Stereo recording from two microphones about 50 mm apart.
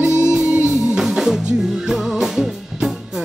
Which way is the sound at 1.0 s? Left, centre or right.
Centre.